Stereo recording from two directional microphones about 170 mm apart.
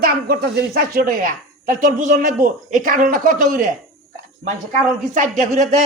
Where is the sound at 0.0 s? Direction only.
65° right (ahead or behind).